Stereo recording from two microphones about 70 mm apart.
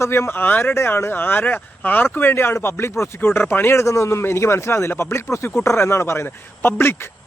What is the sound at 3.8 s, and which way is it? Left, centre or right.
Speech, left.